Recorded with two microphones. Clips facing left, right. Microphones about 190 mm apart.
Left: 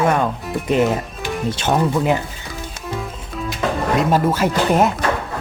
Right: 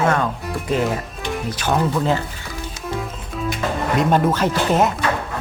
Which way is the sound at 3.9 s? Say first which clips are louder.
Right 1 dB; 5° left (ahead or behind).